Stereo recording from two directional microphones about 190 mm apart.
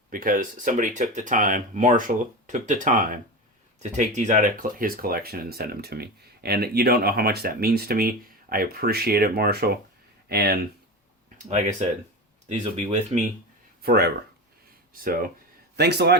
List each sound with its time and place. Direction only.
0.1 s speech: 45° right (ahead or behind)
11.4 s speech: 35° right (ahead or behind)
12.7 s speech: 35° right (ahead or behind)
13.8 s speech: 60° right (ahead or behind)
15.7 s a man's voice: 60° right (ahead or behind)